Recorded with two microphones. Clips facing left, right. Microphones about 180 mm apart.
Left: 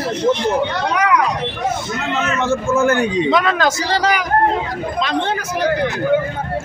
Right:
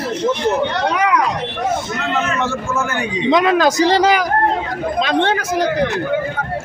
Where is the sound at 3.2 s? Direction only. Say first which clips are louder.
Right 3 dB; 15° right (ahead or behind).